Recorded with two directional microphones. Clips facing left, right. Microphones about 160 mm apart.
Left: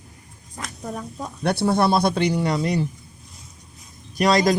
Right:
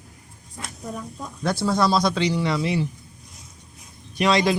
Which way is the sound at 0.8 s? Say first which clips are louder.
Left 2 dB; 45° left (ahead or behind).